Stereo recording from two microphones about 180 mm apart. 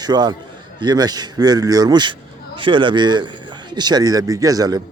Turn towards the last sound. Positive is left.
turn(degrees=-20)  # may be behind; listen again after turning